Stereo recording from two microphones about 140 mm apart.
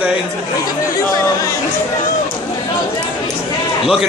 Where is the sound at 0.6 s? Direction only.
25° left (ahead or behind).